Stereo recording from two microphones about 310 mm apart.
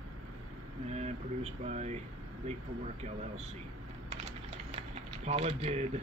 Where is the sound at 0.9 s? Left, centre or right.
Right.